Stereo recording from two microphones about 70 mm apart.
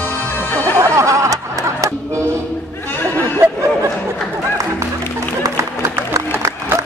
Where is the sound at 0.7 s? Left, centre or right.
Right.